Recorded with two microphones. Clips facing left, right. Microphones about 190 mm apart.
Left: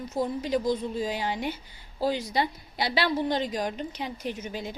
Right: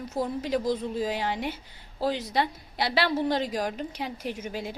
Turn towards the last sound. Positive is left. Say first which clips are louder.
# even
turn(degrees=-5)  # may be behind; listen again after turning